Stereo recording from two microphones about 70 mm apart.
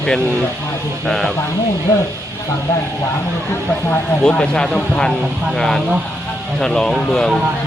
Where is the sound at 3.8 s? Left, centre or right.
Left.